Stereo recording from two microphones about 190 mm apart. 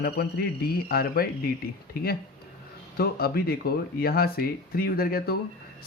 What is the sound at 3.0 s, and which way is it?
Speech, 55° left (ahead or behind).